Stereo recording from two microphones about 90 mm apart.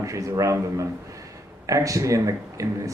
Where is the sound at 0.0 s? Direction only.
35° right (ahead or behind).